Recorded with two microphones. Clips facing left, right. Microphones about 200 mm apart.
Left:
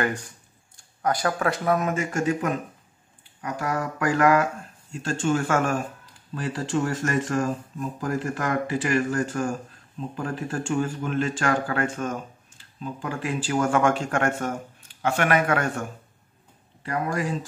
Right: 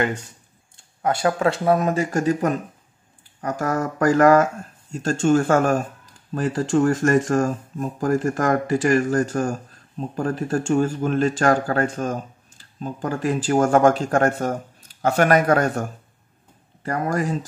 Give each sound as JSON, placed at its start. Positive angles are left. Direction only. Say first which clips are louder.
{"t": 0.0, "sound": "speech", "louder": "right 3 dB", "side_deg": -25}